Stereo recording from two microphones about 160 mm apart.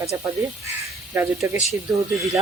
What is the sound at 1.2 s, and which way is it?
Speech, 15° right (ahead or behind).